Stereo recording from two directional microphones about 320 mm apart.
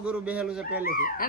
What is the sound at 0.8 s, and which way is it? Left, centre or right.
Speech, left.